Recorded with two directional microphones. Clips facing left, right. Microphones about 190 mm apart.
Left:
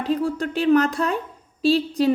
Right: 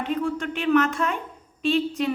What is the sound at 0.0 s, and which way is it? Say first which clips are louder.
A woman's voice: left 3 dB; 35° left (ahead or behind).